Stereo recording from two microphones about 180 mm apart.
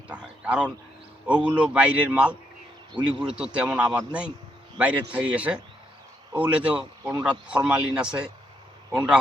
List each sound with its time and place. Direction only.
0.1 s a man's voice: 5° right (ahead or behind)